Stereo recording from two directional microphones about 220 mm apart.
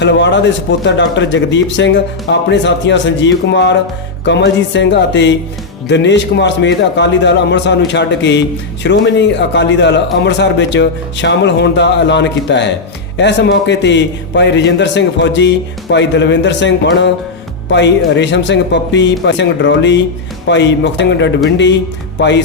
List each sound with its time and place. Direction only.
0.0 s speech: 55° left (ahead or behind)